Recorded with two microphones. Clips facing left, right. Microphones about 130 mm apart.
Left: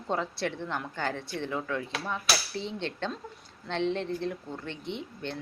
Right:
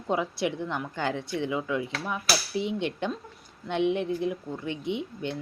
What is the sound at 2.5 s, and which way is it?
A woman's voice, 15° right (ahead or behind).